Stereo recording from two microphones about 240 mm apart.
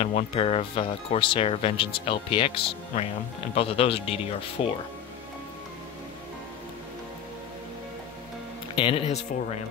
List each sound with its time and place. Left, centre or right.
0.0 s speech: left
8.7 s speech: left